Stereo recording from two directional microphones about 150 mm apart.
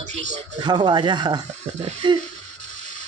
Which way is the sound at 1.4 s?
50° right (ahead or behind).